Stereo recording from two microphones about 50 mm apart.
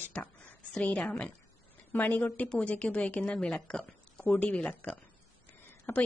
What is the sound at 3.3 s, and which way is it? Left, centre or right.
A woman's voice, centre.